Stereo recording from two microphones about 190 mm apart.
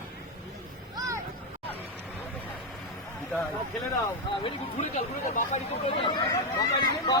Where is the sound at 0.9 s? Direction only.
15° right (ahead or behind).